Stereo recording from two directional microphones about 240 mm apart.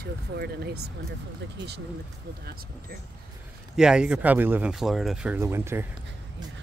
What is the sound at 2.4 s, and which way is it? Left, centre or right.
Speech, right.